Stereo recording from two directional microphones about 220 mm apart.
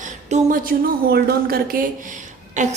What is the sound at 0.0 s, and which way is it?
A woman's voice, 35° right (ahead or behind).